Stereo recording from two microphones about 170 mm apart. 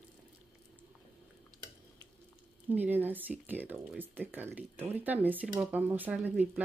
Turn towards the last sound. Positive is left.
turn(degrees=-10)  # may be behind; listen again after turning